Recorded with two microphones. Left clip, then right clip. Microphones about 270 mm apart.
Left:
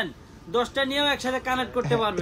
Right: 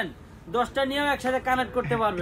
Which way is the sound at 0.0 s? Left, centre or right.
Centre.